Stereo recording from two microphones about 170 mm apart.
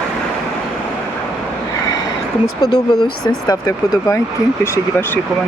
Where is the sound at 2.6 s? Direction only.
25° left (ahead or behind).